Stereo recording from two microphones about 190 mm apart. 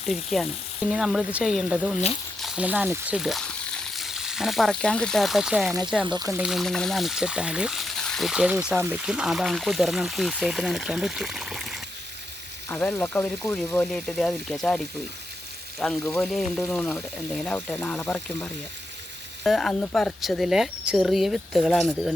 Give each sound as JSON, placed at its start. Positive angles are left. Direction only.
{"t": 0.1, "sound": "speech", "side_deg": 0}
{"t": 6.1, "sound": "speech", "side_deg": -20}
{"t": 6.3, "sound": "speech", "side_deg": -5}
{"t": 15.8, "sound": "frying", "side_deg": 10}
{"t": 16.2, "sound": "speech", "side_deg": 0}
{"t": 19.5, "sound": "speech", "side_deg": 0}